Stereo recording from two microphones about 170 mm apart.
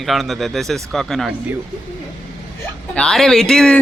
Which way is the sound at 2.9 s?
5° left (ahead or behind).